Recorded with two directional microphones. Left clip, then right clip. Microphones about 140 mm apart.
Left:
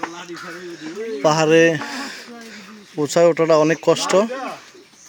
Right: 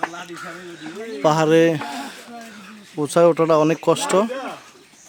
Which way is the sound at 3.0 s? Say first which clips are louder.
Even; 5° right (ahead or behind).